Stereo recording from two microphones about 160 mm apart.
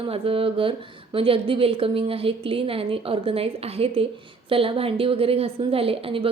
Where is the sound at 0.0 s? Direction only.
35° right (ahead or behind).